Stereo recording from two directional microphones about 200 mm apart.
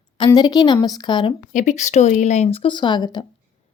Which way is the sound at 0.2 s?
20° left (ahead or behind).